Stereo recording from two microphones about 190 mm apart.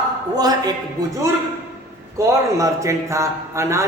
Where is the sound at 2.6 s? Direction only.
15° right (ahead or behind).